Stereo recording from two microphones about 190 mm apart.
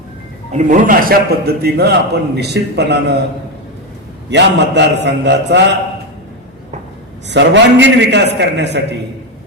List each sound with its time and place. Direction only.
0.5 s a man's voice: 45° right (ahead or behind); by 3.2 s 60° right (ahead or behind)
4.3 s a man's voice: 65° right (ahead or behind)
7.3 s a man's voice: 70° right (ahead or behind)